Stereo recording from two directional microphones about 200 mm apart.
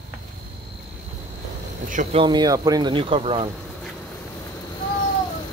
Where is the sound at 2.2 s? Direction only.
20° right (ahead or behind).